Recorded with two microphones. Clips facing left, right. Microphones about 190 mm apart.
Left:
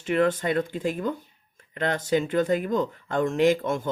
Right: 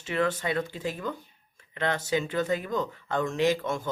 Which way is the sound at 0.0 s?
50° left (ahead or behind).